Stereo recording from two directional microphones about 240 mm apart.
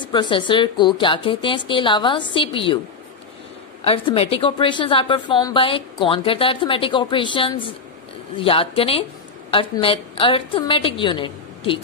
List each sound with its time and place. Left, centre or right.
0.0 s a woman's voice: centre
3.8 s a woman's voice: left